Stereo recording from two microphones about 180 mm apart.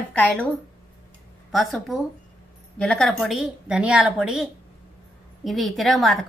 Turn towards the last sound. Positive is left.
turn(degrees=0)  # may be behind; listen again after turning